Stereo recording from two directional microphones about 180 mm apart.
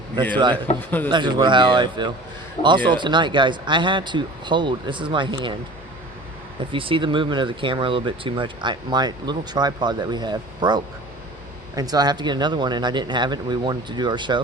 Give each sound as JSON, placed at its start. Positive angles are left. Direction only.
{"t": 0.9, "sound": "speech", "side_deg": 10}
{"t": 1.1, "sound": "speech", "side_deg": -25}
{"t": 6.6, "sound": "speech", "side_deg": -30}